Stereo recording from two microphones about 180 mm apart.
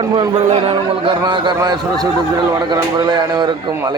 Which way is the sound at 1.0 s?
25° right (ahead or behind).